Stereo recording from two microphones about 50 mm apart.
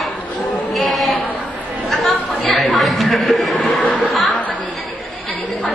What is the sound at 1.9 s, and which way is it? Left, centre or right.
Chatter, centre.